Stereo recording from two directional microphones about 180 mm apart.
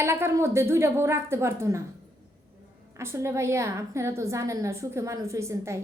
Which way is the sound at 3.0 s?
15° right (ahead or behind).